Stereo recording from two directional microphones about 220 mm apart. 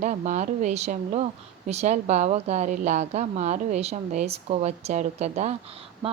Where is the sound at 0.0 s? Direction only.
35° right (ahead or behind).